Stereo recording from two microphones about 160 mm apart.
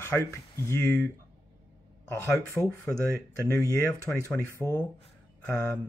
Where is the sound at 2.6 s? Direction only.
15° left (ahead or behind).